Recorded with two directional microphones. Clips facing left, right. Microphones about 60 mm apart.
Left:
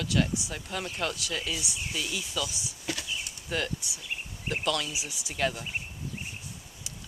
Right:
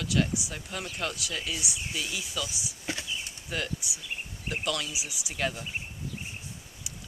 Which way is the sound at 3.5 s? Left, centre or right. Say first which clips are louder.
Left 2 dB; centre.